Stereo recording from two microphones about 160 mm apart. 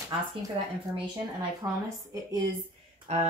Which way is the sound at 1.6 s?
20° right (ahead or behind).